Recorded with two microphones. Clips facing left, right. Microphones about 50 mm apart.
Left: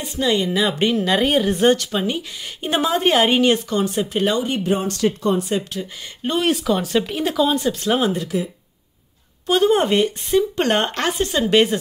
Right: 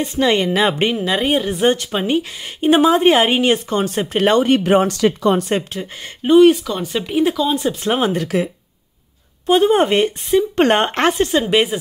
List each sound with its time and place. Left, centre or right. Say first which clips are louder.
0.0 s speech: right 4 dB; right
1.0 s a woman's voice: even; centre
4.0 s speech: right 5 dB; right
5.5 s speech: right 3 dB; right
6.2 s speech: right 9 dB; centre
7.5 s a woman's voice: right 1 dB; right
9.5 s a woman's voice: right 3 dB; right
11.4 s speech: even; centre